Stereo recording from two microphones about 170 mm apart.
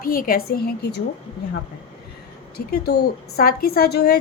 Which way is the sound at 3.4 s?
60° left (ahead or behind).